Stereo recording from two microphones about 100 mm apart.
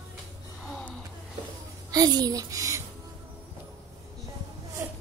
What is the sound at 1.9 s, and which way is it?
Speech, 40° right (ahead or behind).